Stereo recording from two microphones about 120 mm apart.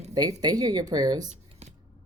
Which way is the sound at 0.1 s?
35° right (ahead or behind).